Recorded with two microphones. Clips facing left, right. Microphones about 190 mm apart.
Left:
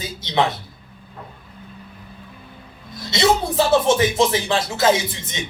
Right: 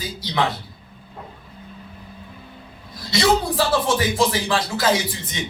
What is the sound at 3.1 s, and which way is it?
Speech, 25° left (ahead or behind).